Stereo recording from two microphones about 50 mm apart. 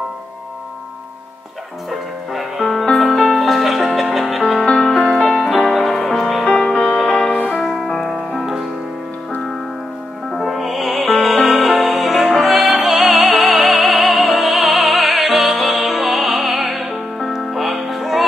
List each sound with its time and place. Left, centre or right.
1.9 s music: centre
4.6 s music: centre
5.3 s music: centre
6.4 s music: centre
10.3 s music: centre